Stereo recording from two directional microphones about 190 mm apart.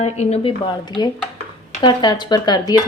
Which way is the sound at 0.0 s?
35° left (ahead or behind).